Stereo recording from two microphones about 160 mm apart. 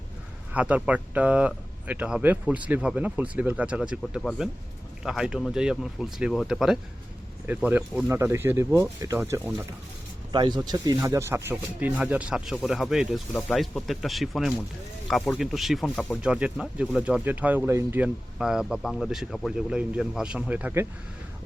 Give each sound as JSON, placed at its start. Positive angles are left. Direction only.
{"t": 0.5, "sound": "speech", "side_deg": -10}
{"t": 10.3, "sound": "speech", "side_deg": -25}